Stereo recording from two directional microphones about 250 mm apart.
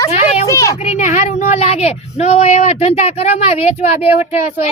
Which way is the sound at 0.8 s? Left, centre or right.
Left.